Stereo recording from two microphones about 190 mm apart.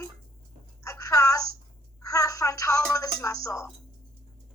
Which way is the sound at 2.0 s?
15° left (ahead or behind).